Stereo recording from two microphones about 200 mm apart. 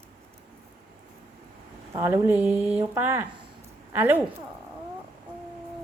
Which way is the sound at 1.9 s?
15° right (ahead or behind).